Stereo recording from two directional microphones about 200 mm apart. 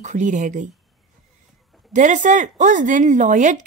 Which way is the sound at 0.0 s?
40° right (ahead or behind).